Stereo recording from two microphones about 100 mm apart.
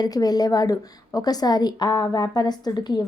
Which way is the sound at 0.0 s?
40° left (ahead or behind).